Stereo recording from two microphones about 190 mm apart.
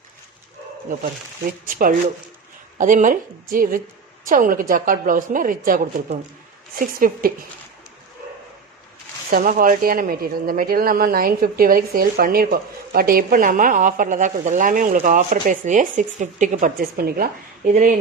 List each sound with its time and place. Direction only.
1.6 s speech: 45° right (ahead or behind)
9.3 s speech: 45° right (ahead or behind)